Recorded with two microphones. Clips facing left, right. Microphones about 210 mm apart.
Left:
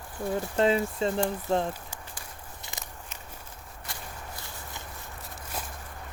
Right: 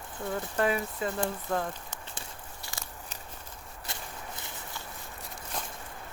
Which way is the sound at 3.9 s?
20° right (ahead or behind).